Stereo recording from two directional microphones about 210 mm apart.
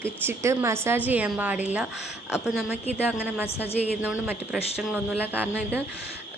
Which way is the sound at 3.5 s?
30° left (ahead or behind).